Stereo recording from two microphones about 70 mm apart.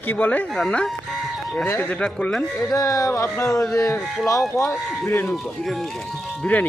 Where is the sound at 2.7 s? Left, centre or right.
Left.